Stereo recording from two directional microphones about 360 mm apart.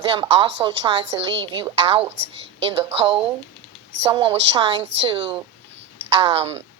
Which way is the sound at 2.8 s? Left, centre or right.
Centre.